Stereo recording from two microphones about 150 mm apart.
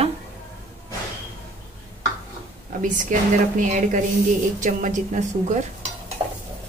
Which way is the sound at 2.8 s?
60° right (ahead or behind).